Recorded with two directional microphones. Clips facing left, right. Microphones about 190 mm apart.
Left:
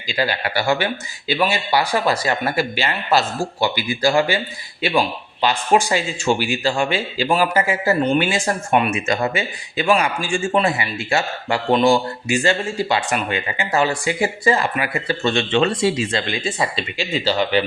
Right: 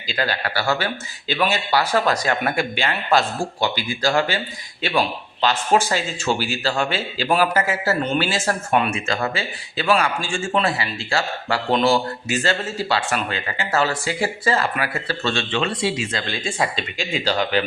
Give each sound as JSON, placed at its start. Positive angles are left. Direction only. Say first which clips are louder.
{"t": 0.1, "sound": "speech", "louder": "left 2 dB", "side_deg": 10}
{"t": 15.6, "sound": "speech", "louder": "left 5 dB", "side_deg": 40}
{"t": 16.2, "sound": "speech", "louder": "left 3 dB", "side_deg": 15}
{"t": 16.6, "sound": "speech", "louder": "left 1 dB", "side_deg": 0}